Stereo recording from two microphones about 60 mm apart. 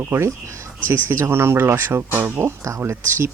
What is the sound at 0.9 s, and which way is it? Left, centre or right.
Speech, right.